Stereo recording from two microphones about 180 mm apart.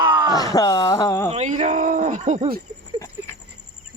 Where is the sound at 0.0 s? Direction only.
25° right (ahead or behind).